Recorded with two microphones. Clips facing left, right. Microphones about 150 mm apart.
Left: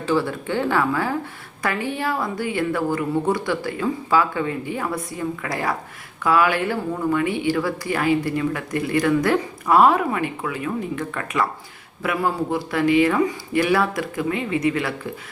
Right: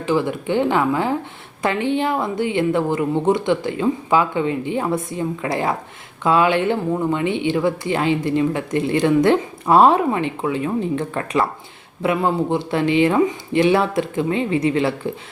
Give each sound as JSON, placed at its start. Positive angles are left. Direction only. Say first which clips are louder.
{"t": 0.0, "sound": "speech", "louder": "right 2 dB", "side_deg": -20}